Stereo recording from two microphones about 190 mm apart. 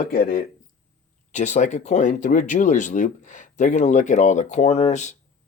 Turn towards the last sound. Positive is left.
turn(degrees=35)  # may be behind; listen again after turning